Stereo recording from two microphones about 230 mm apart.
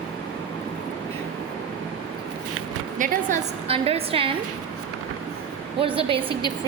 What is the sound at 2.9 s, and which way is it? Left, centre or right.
A woman's voice, right.